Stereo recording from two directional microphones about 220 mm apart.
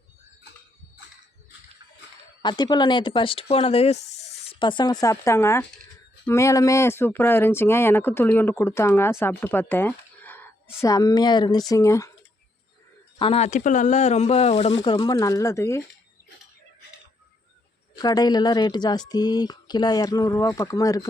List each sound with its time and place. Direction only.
2.4 s speech: 20° left (ahead or behind)
13.1 s speech: 25° left (ahead or behind)
17.9 s speech: 15° left (ahead or behind)